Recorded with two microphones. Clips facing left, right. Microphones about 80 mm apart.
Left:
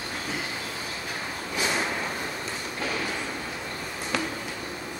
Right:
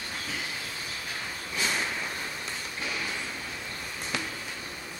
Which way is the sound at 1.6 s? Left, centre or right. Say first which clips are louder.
Left 3 dB; left.